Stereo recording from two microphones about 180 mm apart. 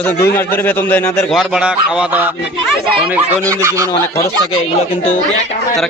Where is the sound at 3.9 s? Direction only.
15° left (ahead or behind).